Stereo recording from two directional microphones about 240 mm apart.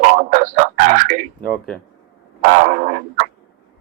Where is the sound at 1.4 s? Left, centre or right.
Centre.